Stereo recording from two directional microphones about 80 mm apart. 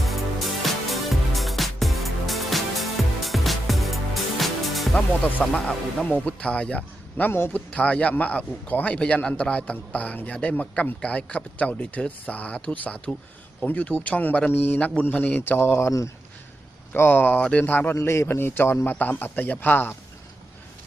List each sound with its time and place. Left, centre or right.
0.0 s music: centre
5.4 s a man's voice: centre
7.7 s a man's voice: centre
16.9 s a man's voice: left
17.9 s a man's voice: left